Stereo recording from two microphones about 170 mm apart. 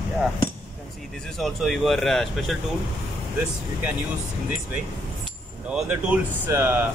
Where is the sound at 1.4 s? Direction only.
Centre (ahead or behind).